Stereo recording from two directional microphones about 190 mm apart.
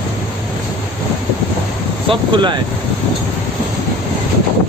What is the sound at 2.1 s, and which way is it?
Speech, 25° right (ahead or behind).